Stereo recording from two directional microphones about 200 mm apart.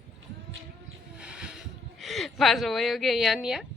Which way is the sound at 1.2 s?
5° right (ahead or behind).